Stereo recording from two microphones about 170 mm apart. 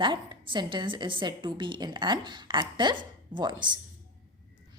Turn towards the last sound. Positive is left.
turn(degrees=-25)  # may be behind; listen again after turning